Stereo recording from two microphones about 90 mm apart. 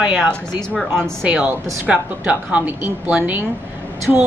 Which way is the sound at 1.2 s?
15° right (ahead or behind).